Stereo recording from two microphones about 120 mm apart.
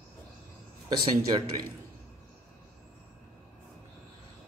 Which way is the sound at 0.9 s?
35° right (ahead or behind).